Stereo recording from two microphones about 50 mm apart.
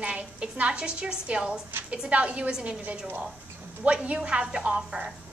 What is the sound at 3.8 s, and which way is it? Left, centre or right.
A woman's voice, right.